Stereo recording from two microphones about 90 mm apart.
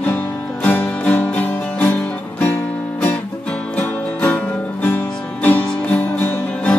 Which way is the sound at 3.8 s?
15° left (ahead or behind).